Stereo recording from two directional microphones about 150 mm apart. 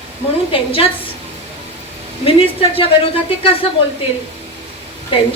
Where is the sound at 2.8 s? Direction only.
40° left (ahead or behind).